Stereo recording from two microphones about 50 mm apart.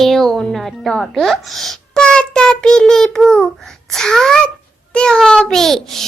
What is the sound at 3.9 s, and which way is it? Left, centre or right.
A child's voice, centre.